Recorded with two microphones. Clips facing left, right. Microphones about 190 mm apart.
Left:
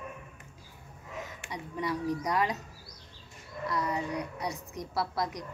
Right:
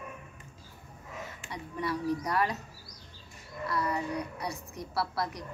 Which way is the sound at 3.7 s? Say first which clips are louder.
Even; 20° left (ahead or behind).